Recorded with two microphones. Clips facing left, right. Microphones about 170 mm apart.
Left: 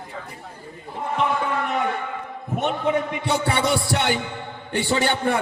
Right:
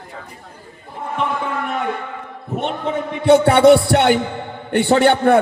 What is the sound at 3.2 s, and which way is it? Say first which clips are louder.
Music: right 17 dB; 60° right (ahead or behind).